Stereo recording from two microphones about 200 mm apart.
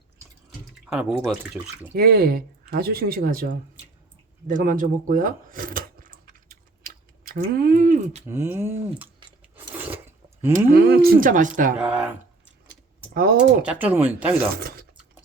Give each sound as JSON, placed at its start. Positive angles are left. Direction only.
{"t": 0.9, "sound": "speech", "side_deg": 0}
{"t": 2.0, "sound": "speech", "side_deg": -50}
{"t": 4.4, "sound": "a sound", "side_deg": -40}
{"t": 8.3, "sound": "speech", "side_deg": -10}
{"t": 9.7, "sound": "a sound", "side_deg": -10}
{"t": 10.7, "sound": "speech", "side_deg": -50}
{"t": 11.8, "sound": "speech", "side_deg": -5}
{"t": 14.5, "sound": "speech", "side_deg": -50}